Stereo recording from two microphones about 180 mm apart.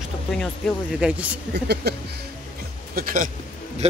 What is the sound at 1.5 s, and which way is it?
Speech, 65° right (ahead or behind).